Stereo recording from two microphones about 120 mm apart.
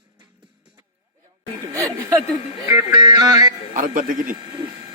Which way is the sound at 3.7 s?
90° right.